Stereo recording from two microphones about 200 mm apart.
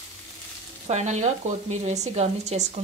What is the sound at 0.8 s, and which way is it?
Speech, 35° right (ahead or behind).